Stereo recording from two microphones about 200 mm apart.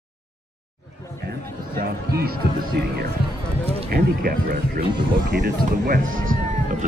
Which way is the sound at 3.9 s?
50° right (ahead or behind).